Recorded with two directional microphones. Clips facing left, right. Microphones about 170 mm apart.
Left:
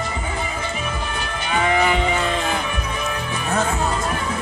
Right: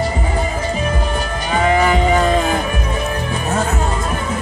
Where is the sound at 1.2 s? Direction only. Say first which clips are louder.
Right 4 dB; 40° right (ahead or behind).